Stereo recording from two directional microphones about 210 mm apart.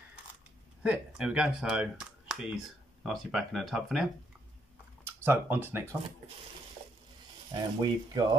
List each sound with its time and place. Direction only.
0.8 s speech: 5° right (ahead or behind)
7.8 s speech: 20° right (ahead or behind)